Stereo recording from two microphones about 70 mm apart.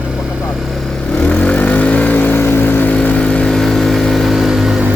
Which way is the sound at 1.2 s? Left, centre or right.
Centre.